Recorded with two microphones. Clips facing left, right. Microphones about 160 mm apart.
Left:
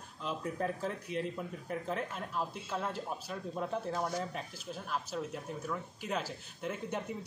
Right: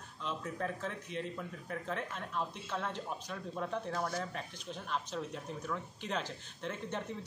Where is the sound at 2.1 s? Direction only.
5° left (ahead or behind).